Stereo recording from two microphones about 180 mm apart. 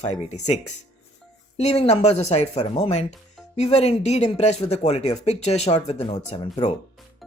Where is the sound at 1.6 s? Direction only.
35° left (ahead or behind).